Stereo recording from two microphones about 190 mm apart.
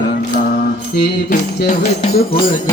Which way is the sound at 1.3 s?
35° left (ahead or behind).